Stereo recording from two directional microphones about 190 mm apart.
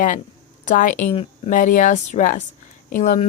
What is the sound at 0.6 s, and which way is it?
Speech, 45° left (ahead or behind).